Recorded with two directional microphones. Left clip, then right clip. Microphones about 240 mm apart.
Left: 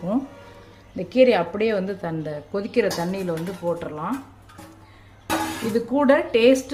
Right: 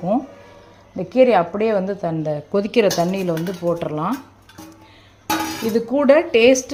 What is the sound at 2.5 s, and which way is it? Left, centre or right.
Speech, right.